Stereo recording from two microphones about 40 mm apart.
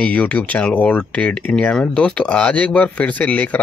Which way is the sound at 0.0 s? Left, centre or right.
Left.